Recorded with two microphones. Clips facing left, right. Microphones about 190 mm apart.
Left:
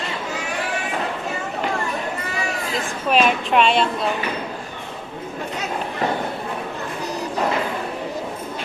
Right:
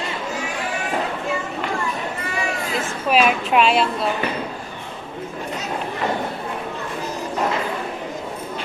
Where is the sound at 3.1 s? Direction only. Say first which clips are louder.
Even; 5° right (ahead or behind).